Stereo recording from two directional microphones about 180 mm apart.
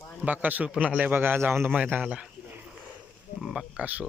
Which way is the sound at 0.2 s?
10° right (ahead or behind).